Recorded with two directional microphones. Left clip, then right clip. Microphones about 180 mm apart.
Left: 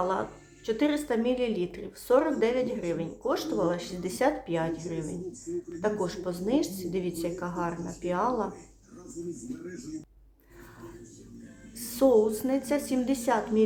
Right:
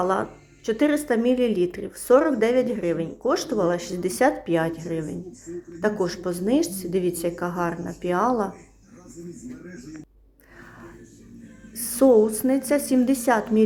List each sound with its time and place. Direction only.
0.0 s a woman's voice: 25° right (ahead or behind)
11.7 s a woman's voice: 25° right (ahead or behind)